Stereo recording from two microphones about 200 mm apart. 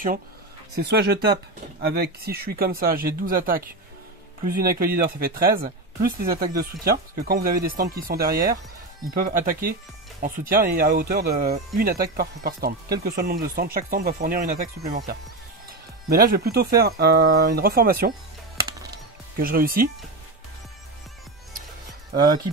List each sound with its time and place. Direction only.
0.7 s speech: 50° right (ahead or behind)
18.6 s music: 15° right (ahead or behind)
19.4 s speech: 45° right (ahead or behind)